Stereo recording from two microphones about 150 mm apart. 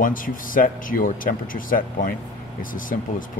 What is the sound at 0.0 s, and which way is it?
Speech, 65° left (ahead or behind).